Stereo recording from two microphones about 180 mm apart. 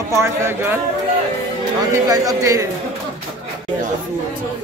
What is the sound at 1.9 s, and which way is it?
Speech, 20° right (ahead or behind).